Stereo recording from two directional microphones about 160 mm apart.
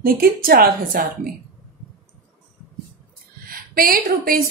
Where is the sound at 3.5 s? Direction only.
65° right (ahead or behind).